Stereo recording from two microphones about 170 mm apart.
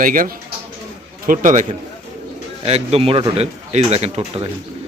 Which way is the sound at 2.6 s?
35° right (ahead or behind).